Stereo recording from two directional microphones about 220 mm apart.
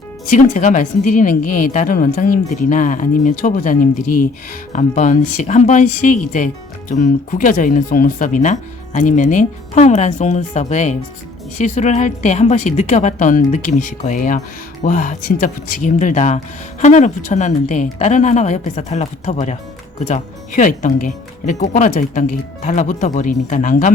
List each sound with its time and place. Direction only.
0.3 s speech: 35° left (ahead or behind)